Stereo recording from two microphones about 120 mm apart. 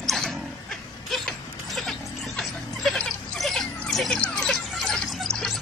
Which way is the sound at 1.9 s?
Centre (ahead or behind).